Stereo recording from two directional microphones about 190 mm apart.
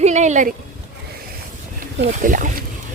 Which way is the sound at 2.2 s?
40° right (ahead or behind).